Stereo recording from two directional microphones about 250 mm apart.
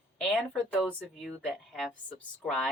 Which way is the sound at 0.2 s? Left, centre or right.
Centre.